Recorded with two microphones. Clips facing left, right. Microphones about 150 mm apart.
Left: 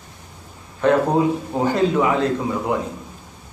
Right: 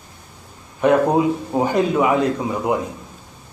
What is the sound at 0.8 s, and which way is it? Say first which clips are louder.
A man's voice: right 1 dB; 15° right (ahead or behind).